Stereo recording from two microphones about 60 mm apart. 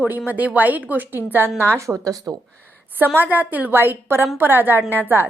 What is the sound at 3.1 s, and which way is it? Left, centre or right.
A woman's voice, right.